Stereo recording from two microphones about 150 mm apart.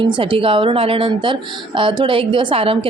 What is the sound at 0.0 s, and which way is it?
A woman's voice, 35° right (ahead or behind).